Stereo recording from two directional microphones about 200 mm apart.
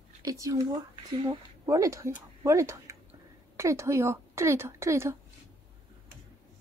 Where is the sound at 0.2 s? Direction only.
15° right (ahead or behind).